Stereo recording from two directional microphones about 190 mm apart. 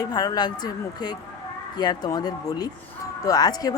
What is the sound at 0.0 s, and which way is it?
Speech, 20° left (ahead or behind).